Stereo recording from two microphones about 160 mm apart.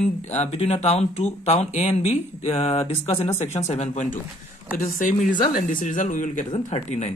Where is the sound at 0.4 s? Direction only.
45° left (ahead or behind).